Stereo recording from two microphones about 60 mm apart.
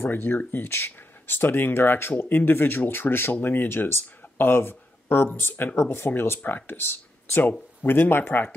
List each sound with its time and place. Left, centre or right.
0.0 s speech: left